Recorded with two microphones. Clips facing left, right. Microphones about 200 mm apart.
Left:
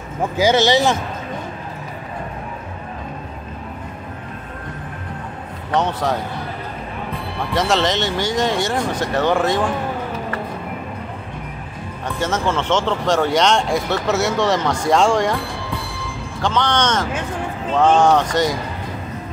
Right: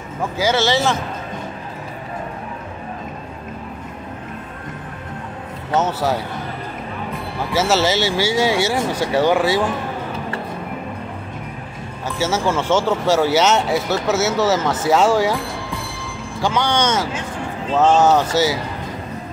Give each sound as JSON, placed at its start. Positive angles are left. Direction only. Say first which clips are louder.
{"t": 0.4, "sound": "speech", "louder": "left 3 dB", "side_deg": 20}
{"t": 5.7, "sound": "speech", "louder": "right 1 dB", "side_deg": -5}
{"t": 7.5, "sound": "speech", "louder": "right 1 dB", "side_deg": -5}
{"t": 12.2, "sound": "speech", "louder": "right 1 dB", "side_deg": -10}
{"t": 16.3, "sound": "speech", "louder": "even", "side_deg": -10}